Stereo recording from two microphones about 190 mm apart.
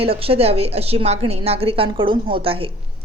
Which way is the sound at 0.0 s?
30° right (ahead or behind).